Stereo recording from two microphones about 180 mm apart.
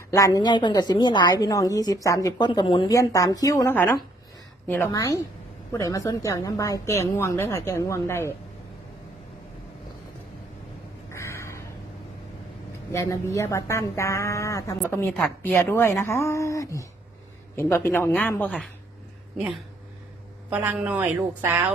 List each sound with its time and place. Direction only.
0.1 s a woman's voice: 20° left (ahead or behind)
11.1 s a sound: 15° left (ahead or behind)
12.9 s a woman's voice: 15° left (ahead or behind)
20.5 s a woman's voice: 10° right (ahead or behind)